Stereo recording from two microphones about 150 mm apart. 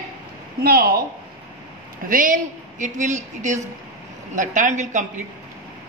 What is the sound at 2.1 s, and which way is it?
A man's voice, 60° right (ahead or behind).